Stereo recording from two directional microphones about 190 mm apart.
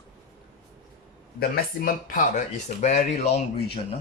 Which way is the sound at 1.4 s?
50° left (ahead or behind).